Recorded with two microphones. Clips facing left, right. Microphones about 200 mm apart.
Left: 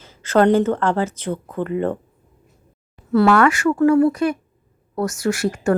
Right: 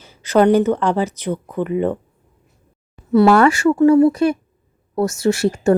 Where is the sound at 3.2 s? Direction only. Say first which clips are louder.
Right 3 dB; 30° right (ahead or behind).